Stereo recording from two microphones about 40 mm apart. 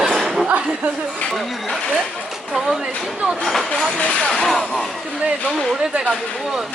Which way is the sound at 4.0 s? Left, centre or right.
Left.